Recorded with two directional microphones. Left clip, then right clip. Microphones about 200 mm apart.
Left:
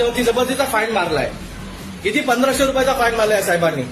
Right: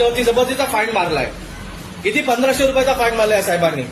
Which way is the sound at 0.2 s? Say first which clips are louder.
Right 1 dB; 15° left (ahead or behind).